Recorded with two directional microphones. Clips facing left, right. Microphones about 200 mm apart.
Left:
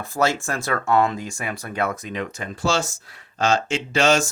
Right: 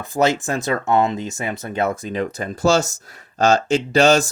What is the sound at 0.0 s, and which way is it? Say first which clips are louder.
Speech: right 4 dB; 20° right (ahead or behind).